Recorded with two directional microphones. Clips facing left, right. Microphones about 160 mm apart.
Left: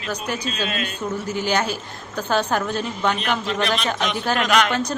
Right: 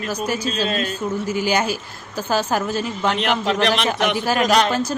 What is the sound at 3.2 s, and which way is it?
Speech, 70° right (ahead or behind).